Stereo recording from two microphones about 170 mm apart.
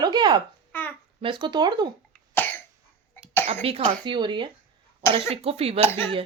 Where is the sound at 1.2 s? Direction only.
25° right (ahead or behind).